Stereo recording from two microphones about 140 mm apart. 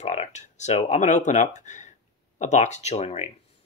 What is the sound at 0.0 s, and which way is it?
Speech, 50° left (ahead or behind).